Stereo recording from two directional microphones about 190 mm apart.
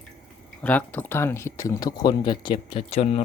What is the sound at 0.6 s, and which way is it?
Speech, 10° left (ahead or behind).